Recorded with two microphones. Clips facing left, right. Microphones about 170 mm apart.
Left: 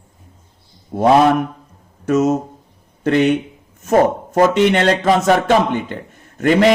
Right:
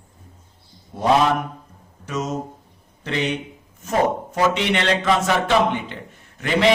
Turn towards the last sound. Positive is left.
turn(degrees=45)  # may be behind; listen again after turning